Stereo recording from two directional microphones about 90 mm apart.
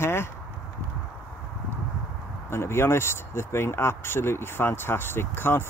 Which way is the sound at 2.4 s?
30° left (ahead or behind).